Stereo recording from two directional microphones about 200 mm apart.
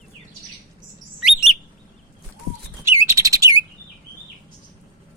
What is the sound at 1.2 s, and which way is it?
Bird, centre (ahead or behind).